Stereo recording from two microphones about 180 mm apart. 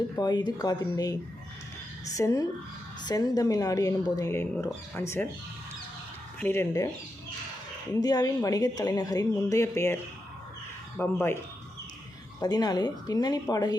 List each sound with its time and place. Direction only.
0.2 s speech: 25° left (ahead or behind)
2.1 s speech: 20° left (ahead or behind)
6.4 s speech: 15° left (ahead or behind)
8.0 s speech: 20° left (ahead or behind)
12.4 s speech: 20° left (ahead or behind)